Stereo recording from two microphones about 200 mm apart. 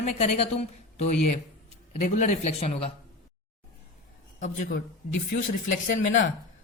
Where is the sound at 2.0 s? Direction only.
40° left (ahead or behind).